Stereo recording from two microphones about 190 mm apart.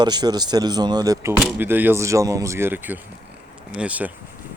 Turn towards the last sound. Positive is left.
turn(degrees=-5)  # may be behind; listen again after turning